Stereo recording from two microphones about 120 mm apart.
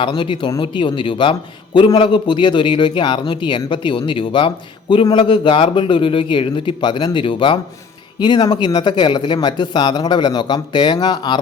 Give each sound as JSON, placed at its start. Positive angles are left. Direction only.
{"t": 0.0, "sound": "speech", "side_deg": 45}